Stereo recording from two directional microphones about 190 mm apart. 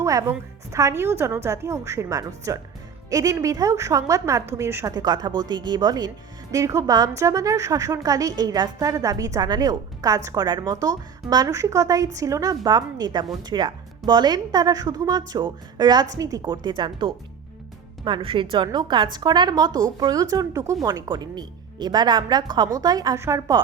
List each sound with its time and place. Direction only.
0.0 s speech: 15° right (ahead or behind)